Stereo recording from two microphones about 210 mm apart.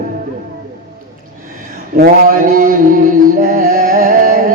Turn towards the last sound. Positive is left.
turn(degrees=-35)  # may be behind; listen again after turning